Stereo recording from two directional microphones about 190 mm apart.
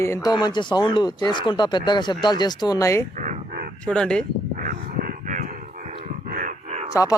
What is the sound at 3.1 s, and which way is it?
Crow, 40° right (ahead or behind).